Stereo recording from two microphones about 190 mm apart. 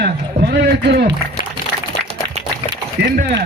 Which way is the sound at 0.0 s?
65° right (ahead or behind).